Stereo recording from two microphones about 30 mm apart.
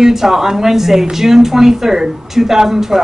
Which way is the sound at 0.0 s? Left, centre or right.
Centre.